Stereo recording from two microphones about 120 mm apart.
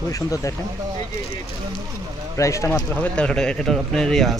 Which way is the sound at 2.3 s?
25° left (ahead or behind).